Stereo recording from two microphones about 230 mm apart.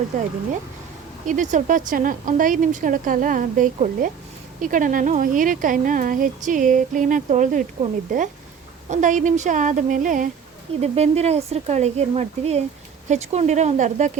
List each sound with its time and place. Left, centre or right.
1.3 s speech: right